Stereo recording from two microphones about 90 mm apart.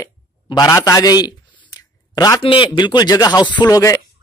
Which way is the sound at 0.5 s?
50° left (ahead or behind).